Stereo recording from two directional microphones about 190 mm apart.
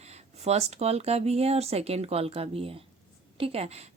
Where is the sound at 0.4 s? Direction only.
35° right (ahead or behind).